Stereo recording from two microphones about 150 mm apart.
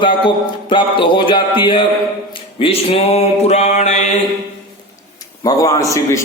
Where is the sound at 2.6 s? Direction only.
40° left (ahead or behind).